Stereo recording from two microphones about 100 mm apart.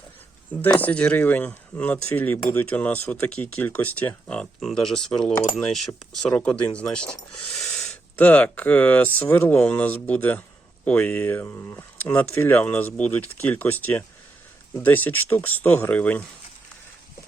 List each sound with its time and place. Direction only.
0.5 s speech: 15° left (ahead or behind)
7.6 s a sound: 5° left (ahead or behind)
8.1 s speech: 15° left (ahead or behind)